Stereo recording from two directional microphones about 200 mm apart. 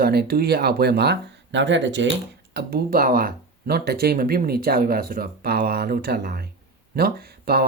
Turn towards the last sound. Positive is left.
turn(degrees=-50)  # may be behind; listen again after turning